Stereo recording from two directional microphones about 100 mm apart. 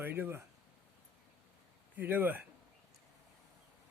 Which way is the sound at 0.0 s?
20° right (ahead or behind).